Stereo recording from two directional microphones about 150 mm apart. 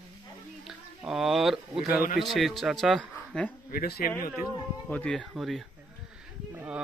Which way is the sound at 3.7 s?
85° left.